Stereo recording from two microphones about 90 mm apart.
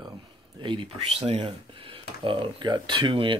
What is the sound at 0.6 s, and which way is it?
Speech, 70° right (ahead or behind).